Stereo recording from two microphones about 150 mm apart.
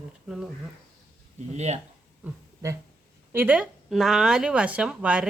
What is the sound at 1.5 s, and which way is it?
Speech, 50° right (ahead or behind).